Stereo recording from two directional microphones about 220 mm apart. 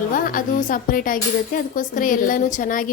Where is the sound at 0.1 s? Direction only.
40° left (ahead or behind).